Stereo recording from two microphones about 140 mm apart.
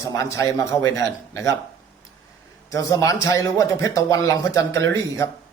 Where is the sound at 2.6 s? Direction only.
25° left (ahead or behind).